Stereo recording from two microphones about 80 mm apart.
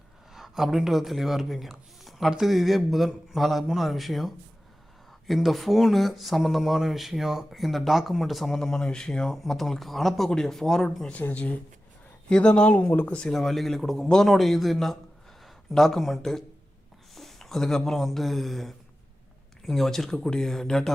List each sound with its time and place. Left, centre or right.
0.3 s speech: centre
13.3 s speech: centre